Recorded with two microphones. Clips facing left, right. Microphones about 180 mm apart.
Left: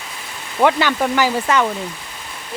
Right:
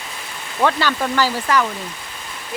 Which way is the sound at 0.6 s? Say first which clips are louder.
Left 3 dB; 15° left (ahead or behind).